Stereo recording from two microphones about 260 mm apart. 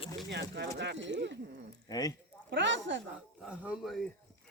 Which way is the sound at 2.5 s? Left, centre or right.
Right.